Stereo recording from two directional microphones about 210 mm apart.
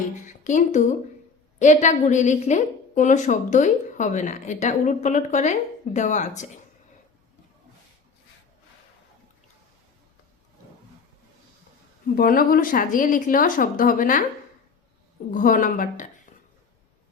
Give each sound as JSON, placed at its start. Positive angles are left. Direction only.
{"t": 0.4, "sound": "a woman's voice", "side_deg": 35}
{"t": 12.0, "sound": "a woman's voice", "side_deg": 45}
{"t": 15.3, "sound": "a woman's voice", "side_deg": 40}